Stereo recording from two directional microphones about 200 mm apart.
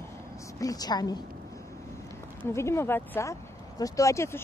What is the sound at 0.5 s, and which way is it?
Speech, 20° left (ahead or behind).